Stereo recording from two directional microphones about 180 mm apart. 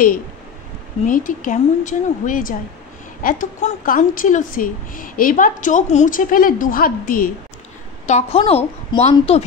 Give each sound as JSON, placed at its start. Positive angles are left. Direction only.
{"t": 1.0, "sound": "a woman's voice", "side_deg": 50}
{"t": 8.1, "sound": "a woman's voice", "side_deg": 35}